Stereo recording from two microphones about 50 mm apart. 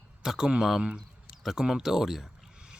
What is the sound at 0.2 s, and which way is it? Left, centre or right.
Speech, centre.